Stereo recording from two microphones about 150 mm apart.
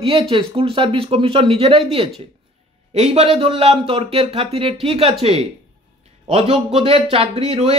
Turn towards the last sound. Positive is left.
turn(degrees=-40)  # may be behind; listen again after turning